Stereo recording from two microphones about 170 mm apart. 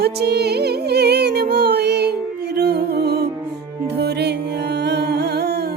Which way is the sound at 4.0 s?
75° right (ahead or behind).